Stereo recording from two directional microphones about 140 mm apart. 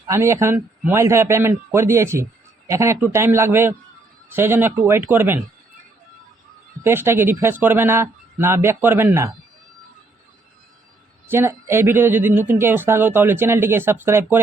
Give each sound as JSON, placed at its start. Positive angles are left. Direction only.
{"t": 0.1, "sound": "a man's voice", "side_deg": -20}
{"t": 6.8, "sound": "speech", "side_deg": -15}
{"t": 11.3, "sound": "speech", "side_deg": -20}